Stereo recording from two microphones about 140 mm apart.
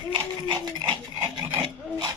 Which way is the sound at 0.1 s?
35° right (ahead or behind).